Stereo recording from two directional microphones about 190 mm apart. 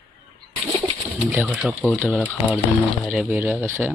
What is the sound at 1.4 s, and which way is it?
Speech, centre (ahead or behind).